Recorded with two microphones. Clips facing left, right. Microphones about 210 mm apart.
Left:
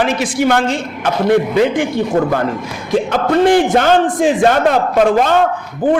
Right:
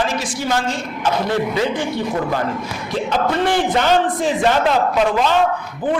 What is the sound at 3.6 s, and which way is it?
A man's voice, 50° left (ahead or behind).